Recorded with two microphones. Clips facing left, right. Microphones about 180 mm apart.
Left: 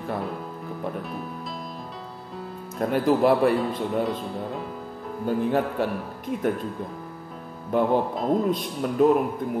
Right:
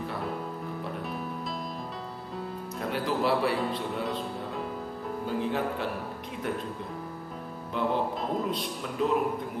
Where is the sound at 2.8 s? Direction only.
50° left (ahead or behind).